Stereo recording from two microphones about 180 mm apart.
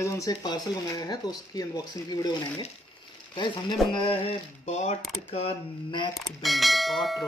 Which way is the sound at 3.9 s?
30° left (ahead or behind).